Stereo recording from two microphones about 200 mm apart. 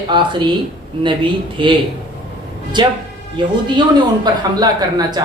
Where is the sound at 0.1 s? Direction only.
25° right (ahead or behind).